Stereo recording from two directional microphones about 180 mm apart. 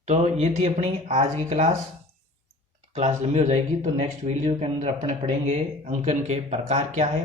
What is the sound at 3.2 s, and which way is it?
Speech, 40° right (ahead or behind).